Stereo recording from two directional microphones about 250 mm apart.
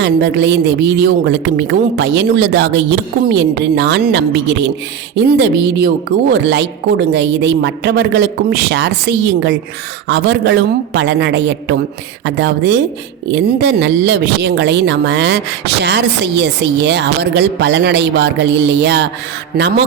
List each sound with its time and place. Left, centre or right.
0.0 s speech: right